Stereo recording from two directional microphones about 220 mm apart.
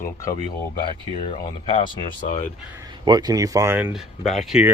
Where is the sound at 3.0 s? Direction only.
15° right (ahead or behind); by 4.6 s centre (ahead or behind).